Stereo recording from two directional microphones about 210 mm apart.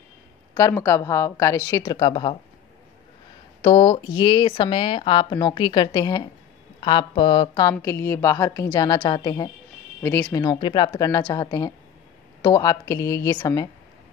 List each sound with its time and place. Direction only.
0.6 s a woman's voice: 15° left (ahead or behind)
3.6 s a woman's voice: 25° left (ahead or behind)
10.4 s a woman's voice: 20° left (ahead or behind)